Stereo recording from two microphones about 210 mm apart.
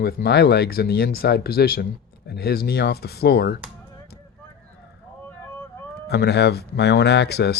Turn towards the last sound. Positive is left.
turn(degrees=50)  # may be behind; listen again after turning